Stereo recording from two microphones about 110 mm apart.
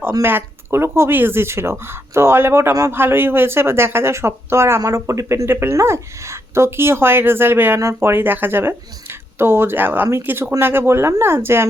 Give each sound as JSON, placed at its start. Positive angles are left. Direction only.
{"t": 0.2, "sound": "speech", "side_deg": -20}